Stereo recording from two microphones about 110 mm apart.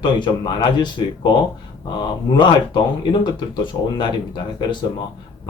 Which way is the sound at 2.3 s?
45° left (ahead or behind).